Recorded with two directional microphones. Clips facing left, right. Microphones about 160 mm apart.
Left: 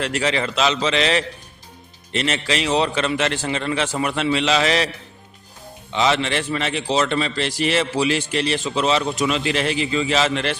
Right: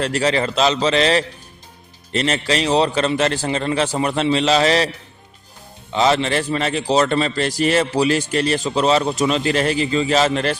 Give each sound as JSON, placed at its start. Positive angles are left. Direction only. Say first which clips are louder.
{"t": 0.0, "sound": "a man's voice", "louder": "right 3 dB", "side_deg": -35}
{"t": 5.9, "sound": "a man's voice", "louder": "right 3 dB", "side_deg": -40}